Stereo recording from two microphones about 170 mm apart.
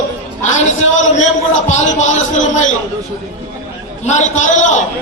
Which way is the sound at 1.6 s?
45° left (ahead or behind).